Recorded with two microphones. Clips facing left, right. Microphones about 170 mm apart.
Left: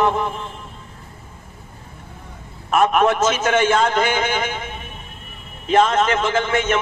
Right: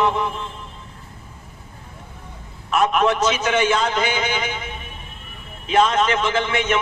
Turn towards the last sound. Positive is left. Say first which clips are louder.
# left 2 dB
turn(degrees=45)  # may be behind; listen again after turning